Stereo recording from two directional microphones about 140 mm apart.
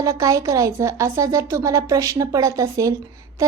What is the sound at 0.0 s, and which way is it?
A woman's voice, 25° right (ahead or behind).